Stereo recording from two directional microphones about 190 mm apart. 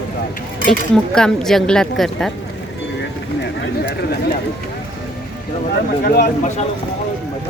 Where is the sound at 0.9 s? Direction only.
5° left (ahead or behind).